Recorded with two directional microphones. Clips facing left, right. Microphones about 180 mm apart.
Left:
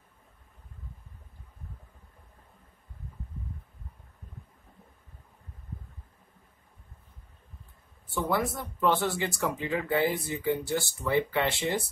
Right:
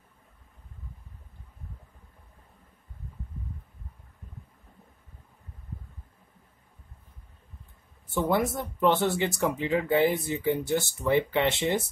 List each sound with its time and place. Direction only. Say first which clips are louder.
8.1 s speech: right 3 dB; 20° right (ahead or behind)